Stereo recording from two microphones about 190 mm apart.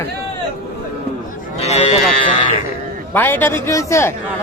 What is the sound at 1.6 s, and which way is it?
Livestock, 35° left (ahead or behind).